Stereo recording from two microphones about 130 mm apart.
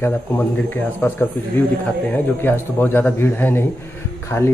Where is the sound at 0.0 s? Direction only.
15° left (ahead or behind).